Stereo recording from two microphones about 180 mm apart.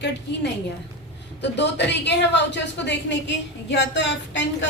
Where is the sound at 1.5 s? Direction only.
75° left (ahead or behind).